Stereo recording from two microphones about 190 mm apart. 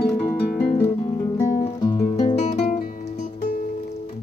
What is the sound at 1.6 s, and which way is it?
Music, 25° left (ahead or behind).